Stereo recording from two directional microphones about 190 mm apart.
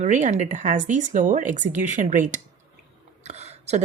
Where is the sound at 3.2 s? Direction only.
35° right (ahead or behind).